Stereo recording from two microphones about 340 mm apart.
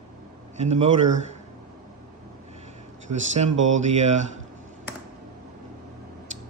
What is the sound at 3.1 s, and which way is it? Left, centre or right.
Speech, right.